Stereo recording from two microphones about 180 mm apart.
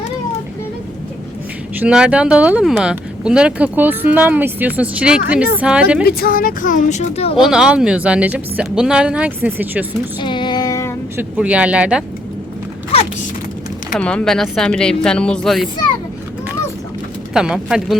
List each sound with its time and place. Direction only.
1.8 s speech: 5° right (ahead or behind)
6.1 s speech: 55° left (ahead or behind); by 7.3 s 35° left (ahead or behind)
7.3 s speech: 5° right (ahead or behind)
10.2 s female singing: 25° left (ahead or behind)
11.2 s speech: 5° right (ahead or behind)
13.9 s speech: 5° left (ahead or behind)
17.3 s speech: 5° right (ahead or behind)